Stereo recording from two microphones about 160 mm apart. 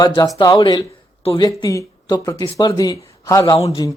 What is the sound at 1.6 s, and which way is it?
Speech, 20° left (ahead or behind).